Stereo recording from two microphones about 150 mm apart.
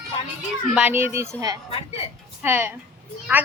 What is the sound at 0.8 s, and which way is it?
Speech, 10° right (ahead or behind).